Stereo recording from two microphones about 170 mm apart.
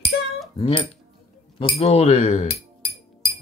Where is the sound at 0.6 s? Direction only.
30° left (ahead or behind).